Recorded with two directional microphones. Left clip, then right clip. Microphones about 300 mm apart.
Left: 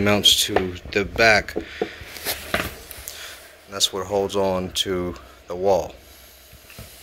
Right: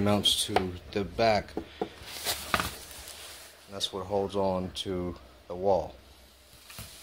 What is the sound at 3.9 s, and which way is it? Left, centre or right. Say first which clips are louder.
Speech: left 8 dB; right.